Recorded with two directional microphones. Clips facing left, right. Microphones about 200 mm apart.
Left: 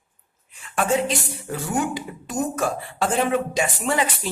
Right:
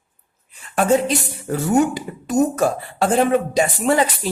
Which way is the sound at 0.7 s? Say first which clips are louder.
Right 5 dB; 40° right (ahead or behind).